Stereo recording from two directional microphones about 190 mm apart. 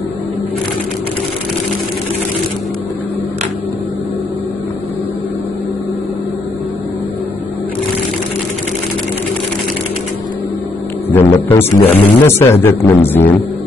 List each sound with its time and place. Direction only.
11.1 s a man's voice: 10° left (ahead or behind)
11.8 s speech: 30° left (ahead or behind)
12.2 s speech: 10° left (ahead or behind)